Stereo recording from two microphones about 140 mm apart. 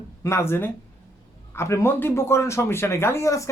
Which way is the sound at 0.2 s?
20° left (ahead or behind).